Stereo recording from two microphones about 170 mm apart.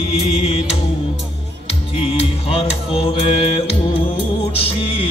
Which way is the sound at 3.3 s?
30° left (ahead or behind).